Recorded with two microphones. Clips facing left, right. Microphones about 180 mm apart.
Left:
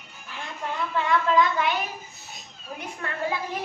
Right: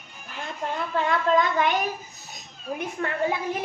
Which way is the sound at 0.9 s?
50° right (ahead or behind).